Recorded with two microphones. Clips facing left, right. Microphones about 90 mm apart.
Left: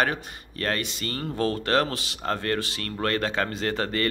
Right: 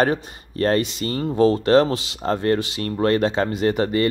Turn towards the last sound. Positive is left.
turn(degrees=-20)  # may be behind; listen again after turning